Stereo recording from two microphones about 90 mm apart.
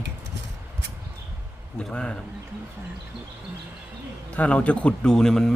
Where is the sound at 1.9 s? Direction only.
10° left (ahead or behind).